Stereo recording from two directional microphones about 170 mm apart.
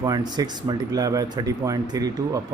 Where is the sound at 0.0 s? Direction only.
25° right (ahead or behind).